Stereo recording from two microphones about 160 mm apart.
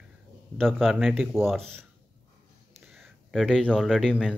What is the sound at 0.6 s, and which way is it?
Speech, centre (ahead or behind).